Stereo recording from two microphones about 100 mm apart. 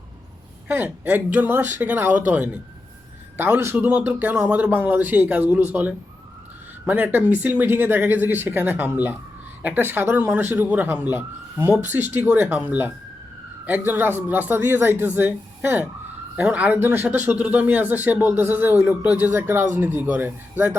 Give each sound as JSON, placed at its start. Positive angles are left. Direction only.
{"t": 0.7, "sound": "a man's voice", "side_deg": -20}
{"t": 6.8, "sound": "a man's voice", "side_deg": -15}